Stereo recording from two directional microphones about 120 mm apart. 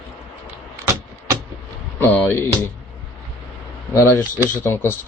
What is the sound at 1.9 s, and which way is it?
Speech, 15° left (ahead or behind).